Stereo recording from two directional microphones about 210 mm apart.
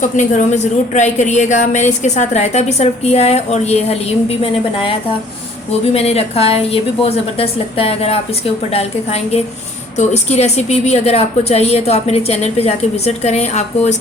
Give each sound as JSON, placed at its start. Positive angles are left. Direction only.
{"t": 0.0, "sound": "a woman's voice", "side_deg": 35}
{"t": 5.9, "sound": "a woman's voice", "side_deg": 30}